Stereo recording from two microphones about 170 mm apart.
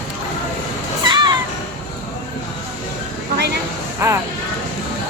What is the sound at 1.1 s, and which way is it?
Music, 25° right (ahead or behind).